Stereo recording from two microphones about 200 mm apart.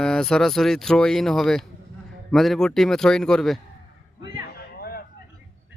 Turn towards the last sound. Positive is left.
turn(degrees=50)  # may be behind; listen again after turning